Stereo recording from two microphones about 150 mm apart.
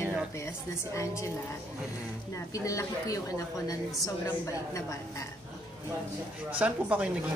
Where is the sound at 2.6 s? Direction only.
20° left (ahead or behind).